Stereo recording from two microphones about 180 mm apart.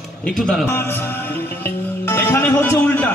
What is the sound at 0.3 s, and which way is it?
Speech, centre (ahead or behind).